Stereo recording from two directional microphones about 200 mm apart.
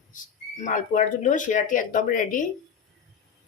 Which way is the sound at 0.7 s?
40° left (ahead or behind).